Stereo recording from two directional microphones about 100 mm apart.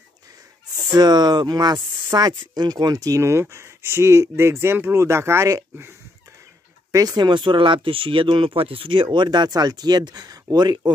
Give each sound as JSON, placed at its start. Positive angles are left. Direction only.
{"t": 0.9, "sound": "speech", "side_deg": -45}
{"t": 6.9, "sound": "speech", "side_deg": -35}